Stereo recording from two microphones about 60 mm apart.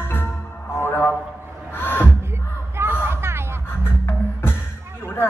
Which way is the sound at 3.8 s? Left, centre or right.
Left.